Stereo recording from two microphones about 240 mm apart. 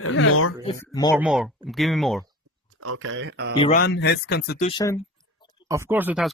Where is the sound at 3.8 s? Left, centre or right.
Left.